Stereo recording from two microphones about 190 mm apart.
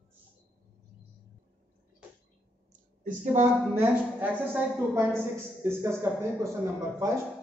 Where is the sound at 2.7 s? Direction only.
40° right (ahead or behind).